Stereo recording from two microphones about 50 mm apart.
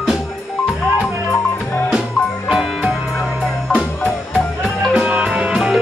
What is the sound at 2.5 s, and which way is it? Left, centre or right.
Music, centre.